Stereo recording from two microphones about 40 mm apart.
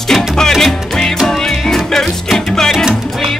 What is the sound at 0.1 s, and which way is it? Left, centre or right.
Music, centre.